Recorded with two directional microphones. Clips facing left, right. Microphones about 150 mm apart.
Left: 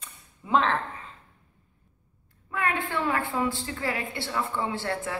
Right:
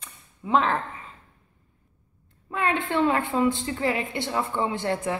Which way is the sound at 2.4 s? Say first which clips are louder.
Right 3 dB; 25° right (ahead or behind).